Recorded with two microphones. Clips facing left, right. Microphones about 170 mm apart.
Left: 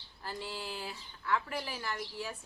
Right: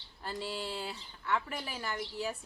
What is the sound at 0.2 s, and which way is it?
Speech, 25° right (ahead or behind).